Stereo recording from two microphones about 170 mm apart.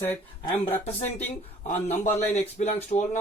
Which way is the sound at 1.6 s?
40° left (ahead or behind).